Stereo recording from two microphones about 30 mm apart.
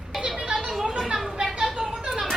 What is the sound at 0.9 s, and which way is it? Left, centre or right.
Speech, centre.